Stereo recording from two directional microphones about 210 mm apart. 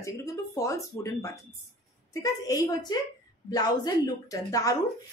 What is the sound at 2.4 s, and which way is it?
Speech, 15° left (ahead or behind).